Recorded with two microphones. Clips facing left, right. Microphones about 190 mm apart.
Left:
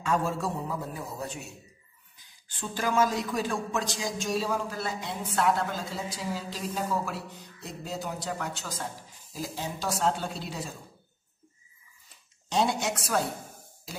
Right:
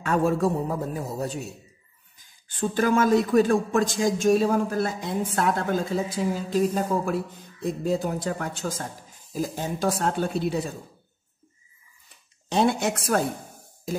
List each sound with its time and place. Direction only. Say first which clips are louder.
0.0 s a man's voice: right 6 dB; 60° right (ahead or behind); by 1.5 s 40° right (ahead or behind)
2.5 s a man's voice: right 6 dB; 55° right (ahead or behind)
12.4 s speech: right 5 dB; 55° right (ahead or behind)